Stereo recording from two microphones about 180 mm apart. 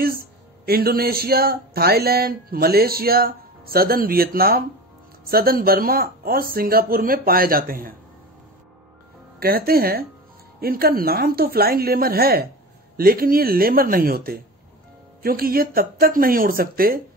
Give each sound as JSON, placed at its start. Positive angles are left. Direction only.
{"t": 0.7, "sound": "speech", "side_deg": -55}
{"t": 9.4, "sound": "speech", "side_deg": -55}